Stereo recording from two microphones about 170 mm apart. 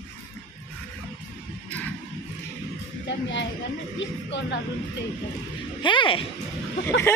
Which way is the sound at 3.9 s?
90° left.